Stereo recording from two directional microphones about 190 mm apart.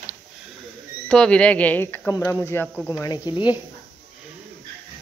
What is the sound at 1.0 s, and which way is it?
Speech, 5° left (ahead or behind).